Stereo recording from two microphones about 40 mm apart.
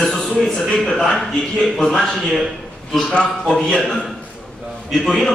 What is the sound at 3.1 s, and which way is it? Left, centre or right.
Speech, left.